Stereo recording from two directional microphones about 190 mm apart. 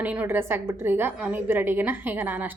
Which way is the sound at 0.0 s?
10° right (ahead or behind).